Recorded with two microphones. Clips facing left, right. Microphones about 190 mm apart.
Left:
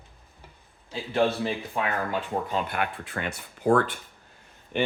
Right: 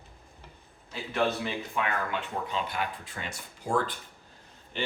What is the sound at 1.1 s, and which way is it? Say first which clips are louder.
Speech: left 4 dB; 35° left (ahead or behind).